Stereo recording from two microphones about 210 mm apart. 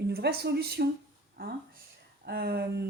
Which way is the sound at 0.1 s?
50° right (ahead or behind).